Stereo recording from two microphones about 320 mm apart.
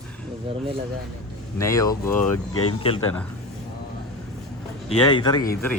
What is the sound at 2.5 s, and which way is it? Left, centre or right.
Speech, left.